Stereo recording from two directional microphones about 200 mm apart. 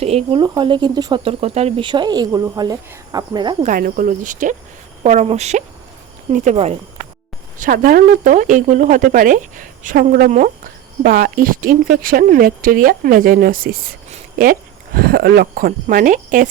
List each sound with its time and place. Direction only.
0.0 s speech: 30° right (ahead or behind)
3.6 s speech: 45° right (ahead or behind)